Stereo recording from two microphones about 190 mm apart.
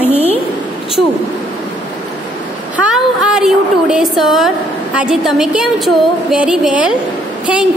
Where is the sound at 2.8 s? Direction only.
5° right (ahead or behind).